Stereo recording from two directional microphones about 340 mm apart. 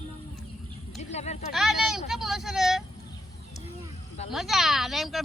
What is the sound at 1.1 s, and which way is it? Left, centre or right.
Speech, centre.